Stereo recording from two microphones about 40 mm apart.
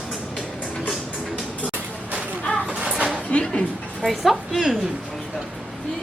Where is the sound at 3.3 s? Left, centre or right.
Left.